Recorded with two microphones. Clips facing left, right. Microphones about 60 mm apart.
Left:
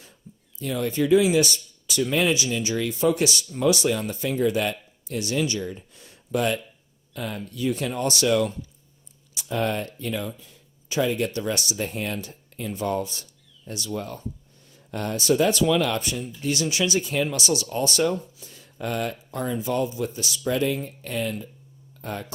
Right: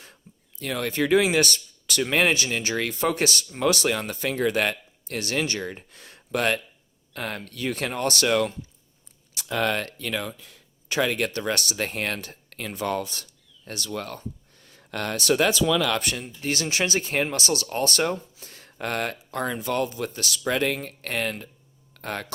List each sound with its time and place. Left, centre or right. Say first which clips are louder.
0.6 s speech: left 1 dB; right
9.5 s speech: right 1 dB; right
16.2 s speech: left 2 dB; right